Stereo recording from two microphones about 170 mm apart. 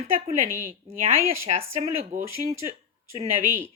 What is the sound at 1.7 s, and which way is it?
Speech, 45° right (ahead or behind).